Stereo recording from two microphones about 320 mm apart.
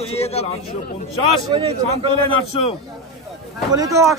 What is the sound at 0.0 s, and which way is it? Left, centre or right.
Speech, centre.